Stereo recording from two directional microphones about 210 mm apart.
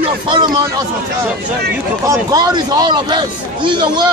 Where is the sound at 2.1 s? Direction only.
15° right (ahead or behind).